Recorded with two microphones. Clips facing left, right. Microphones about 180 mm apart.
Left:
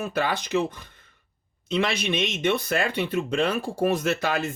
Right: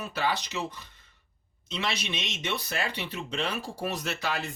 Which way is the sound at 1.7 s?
55° left (ahead or behind).